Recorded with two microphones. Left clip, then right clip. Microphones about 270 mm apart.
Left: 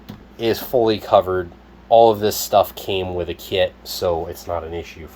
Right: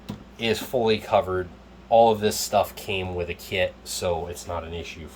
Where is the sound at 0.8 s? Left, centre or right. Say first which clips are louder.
Left 6 dB; left.